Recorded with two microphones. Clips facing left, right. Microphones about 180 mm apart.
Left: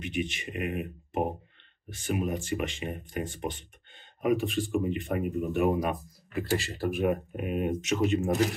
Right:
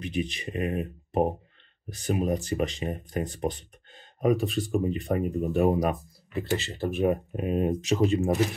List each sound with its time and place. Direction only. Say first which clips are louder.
0.0 s speech: right 2 dB; 35° right (ahead or behind)
6.3 s speech: right 1 dB; 25° right (ahead or behind)